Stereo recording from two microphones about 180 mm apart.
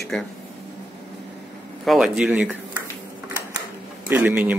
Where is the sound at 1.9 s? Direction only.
5° right (ahead or behind).